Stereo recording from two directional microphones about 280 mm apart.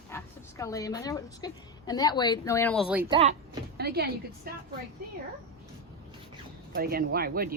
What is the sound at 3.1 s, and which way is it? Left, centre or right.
Speech, right.